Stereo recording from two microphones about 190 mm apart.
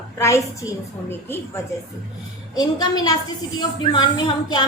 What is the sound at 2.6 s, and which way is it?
A woman's voice, 20° left (ahead or behind).